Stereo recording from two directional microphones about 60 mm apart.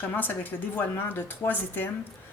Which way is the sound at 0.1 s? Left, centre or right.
Left.